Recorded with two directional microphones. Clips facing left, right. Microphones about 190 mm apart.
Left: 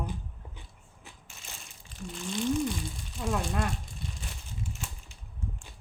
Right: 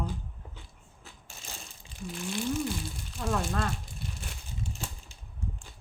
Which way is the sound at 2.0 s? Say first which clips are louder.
Left 1 dB; 5° right (ahead or behind).